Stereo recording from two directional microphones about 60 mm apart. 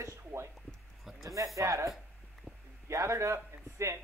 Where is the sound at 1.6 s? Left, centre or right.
Right.